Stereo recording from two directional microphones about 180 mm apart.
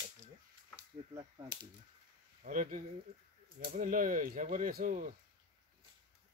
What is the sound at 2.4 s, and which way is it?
Speech, 45° right (ahead or behind).